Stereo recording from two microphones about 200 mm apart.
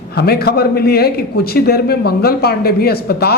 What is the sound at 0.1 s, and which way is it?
A man's voice, 50° left (ahead or behind).